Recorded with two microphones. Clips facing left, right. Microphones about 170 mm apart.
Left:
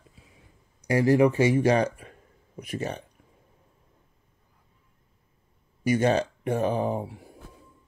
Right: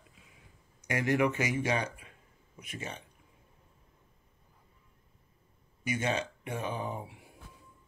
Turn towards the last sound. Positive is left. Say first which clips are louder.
# left 10 dB
turn(degrees=40)  # may be behind; listen again after turning